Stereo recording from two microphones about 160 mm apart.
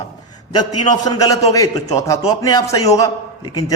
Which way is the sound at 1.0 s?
20° left (ahead or behind).